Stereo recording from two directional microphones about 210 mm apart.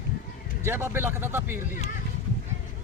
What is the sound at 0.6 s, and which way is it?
Speech, 10° right (ahead or behind).